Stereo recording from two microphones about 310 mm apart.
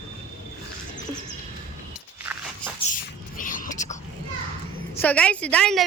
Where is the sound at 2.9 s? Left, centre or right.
Left.